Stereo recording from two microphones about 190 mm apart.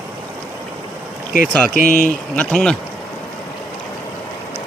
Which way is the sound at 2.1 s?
5° left (ahead or behind).